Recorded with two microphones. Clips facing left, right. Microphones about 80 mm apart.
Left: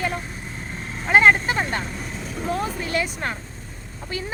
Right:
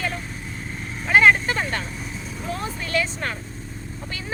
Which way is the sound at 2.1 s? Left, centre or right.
Left.